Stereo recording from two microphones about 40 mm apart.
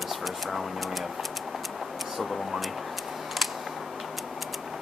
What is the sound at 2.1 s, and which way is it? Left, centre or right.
Speech, centre.